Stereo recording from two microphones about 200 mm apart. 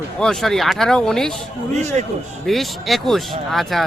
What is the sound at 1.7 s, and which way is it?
Speech, 35° right (ahead or behind).